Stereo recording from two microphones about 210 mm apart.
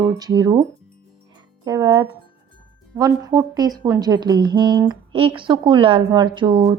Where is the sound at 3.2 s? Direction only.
20° right (ahead or behind).